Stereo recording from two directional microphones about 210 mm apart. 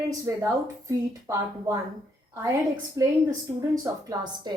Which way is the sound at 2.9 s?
15° right (ahead or behind).